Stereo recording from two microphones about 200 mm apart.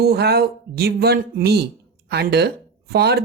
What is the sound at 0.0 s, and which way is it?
A woman's voice, 55° right (ahead or behind).